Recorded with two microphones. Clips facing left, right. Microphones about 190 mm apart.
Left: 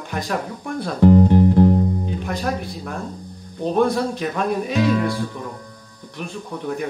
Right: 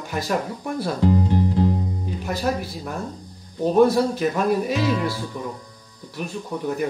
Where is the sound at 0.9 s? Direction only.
55° left (ahead or behind).